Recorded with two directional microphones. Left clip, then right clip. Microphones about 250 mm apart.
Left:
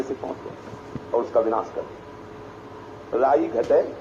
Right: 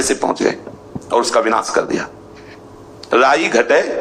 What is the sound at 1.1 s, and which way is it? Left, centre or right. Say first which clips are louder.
Speech: right 7 dB; right.